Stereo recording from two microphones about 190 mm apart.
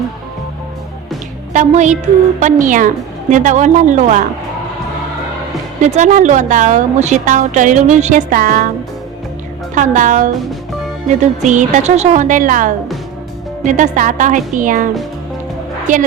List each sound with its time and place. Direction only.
1.5 s a woman's voice: 40° right (ahead or behind)
5.8 s a woman's voice: 40° right (ahead or behind)
9.7 s a woman's voice: 40° right (ahead or behind)